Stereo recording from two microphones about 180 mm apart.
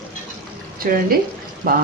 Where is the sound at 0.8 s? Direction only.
55° right (ahead or behind).